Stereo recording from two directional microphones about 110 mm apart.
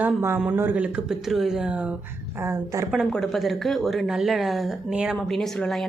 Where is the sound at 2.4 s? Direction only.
25° right (ahead or behind).